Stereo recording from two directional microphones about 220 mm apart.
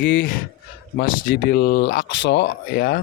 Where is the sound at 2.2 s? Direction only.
55° left (ahead or behind).